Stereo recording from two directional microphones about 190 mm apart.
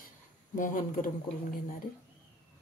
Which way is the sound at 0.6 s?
45° left (ahead or behind).